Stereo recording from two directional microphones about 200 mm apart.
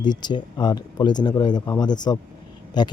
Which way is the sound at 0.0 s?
20° left (ahead or behind).